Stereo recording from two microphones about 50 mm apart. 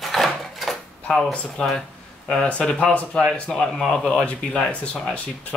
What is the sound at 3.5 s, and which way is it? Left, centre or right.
Speech, centre.